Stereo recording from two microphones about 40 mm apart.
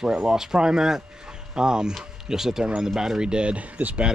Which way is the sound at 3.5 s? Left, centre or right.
Right.